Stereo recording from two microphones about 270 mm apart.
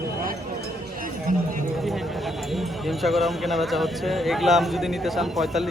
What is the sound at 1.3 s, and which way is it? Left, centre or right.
Speech, right.